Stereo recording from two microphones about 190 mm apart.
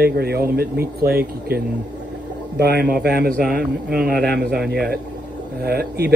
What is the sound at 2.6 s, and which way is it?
A man's voice, 60° right (ahead or behind).